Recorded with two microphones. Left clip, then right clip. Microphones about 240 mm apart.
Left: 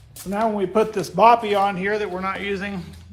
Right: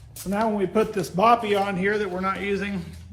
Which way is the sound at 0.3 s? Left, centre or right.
Centre.